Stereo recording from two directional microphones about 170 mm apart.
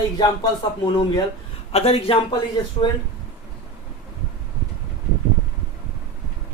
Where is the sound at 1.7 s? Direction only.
35° left (ahead or behind).